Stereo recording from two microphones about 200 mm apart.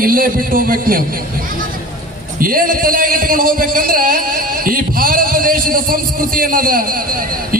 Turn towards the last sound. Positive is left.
turn(degrees=-45)  # may be behind; listen again after turning